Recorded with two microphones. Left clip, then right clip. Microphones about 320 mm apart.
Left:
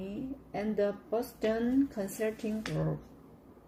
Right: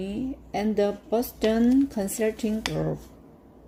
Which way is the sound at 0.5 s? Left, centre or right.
Right.